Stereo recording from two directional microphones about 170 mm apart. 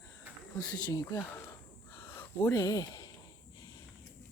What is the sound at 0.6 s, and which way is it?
Speech, 25° left (ahead or behind).